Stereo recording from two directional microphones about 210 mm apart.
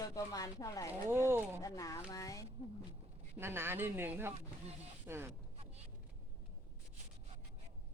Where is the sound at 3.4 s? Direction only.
10° right (ahead or behind).